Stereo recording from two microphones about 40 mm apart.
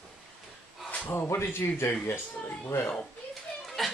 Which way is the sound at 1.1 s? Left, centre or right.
Left.